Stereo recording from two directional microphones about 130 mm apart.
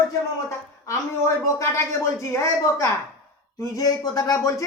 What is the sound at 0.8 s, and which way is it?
Speech, 20° left (ahead or behind).